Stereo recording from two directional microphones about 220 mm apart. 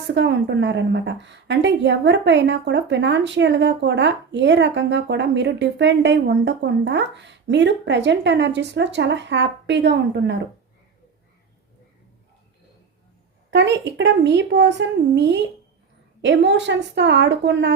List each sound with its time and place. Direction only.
0.1 s a woman's voice: 55° right (ahead or behind)
13.5 s a woman's voice: 55° right (ahead or behind)